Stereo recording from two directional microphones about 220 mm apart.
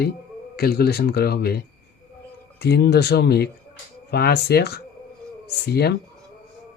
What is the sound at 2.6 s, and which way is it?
Speech, 50° left (ahead or behind).